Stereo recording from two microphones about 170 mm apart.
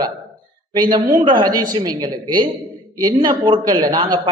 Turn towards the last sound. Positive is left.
turn(degrees=-25)  # may be behind; listen again after turning